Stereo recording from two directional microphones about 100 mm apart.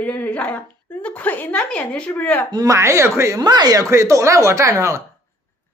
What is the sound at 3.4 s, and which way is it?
Speech, 45° right (ahead or behind).